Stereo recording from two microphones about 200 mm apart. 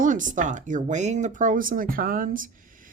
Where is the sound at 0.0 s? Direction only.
40° right (ahead or behind).